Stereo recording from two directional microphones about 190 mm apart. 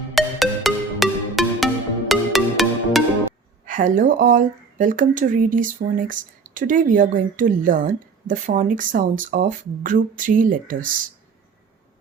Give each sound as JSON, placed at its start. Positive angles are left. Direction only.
{"t": 0.1, "sound": "music", "side_deg": 0}
{"t": 3.7, "sound": "speech", "side_deg": -45}